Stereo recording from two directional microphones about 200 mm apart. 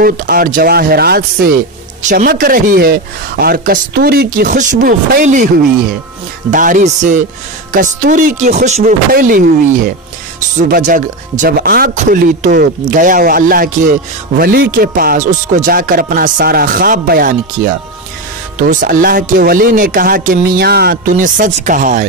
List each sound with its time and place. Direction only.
0.0 s speech: 45° right (ahead or behind)
6.5 s speech: 40° right (ahead or behind)